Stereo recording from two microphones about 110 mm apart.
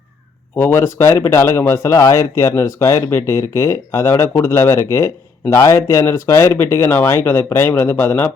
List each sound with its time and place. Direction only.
0.5 s speech: 20° left (ahead or behind)